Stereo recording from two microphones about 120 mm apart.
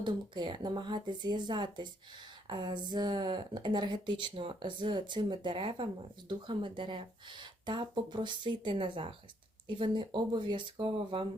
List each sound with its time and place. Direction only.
0.0 s speech: 40° right (ahead or behind)